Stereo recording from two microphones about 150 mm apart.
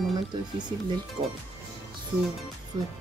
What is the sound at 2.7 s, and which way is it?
Speech, 30° right (ahead or behind).